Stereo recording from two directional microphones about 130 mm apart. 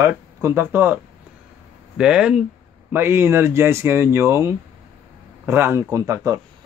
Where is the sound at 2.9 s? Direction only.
20° right (ahead or behind).